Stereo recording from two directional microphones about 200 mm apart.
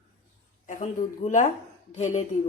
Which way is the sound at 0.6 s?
40° left (ahead or behind).